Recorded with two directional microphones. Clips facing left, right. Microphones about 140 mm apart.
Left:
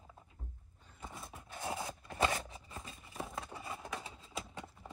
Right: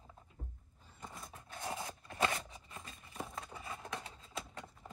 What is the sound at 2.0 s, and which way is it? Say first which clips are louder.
Scissors: left 2 dB; 25° left (ahead or behind).